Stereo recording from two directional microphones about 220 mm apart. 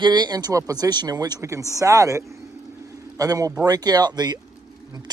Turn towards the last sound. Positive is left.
turn(degrees=-20)  # may be behind; listen again after turning